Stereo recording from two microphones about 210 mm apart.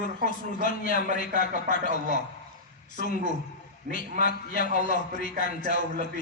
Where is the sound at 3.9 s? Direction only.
45° left (ahead or behind).